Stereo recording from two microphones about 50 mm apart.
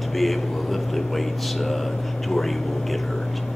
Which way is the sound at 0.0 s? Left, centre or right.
Centre.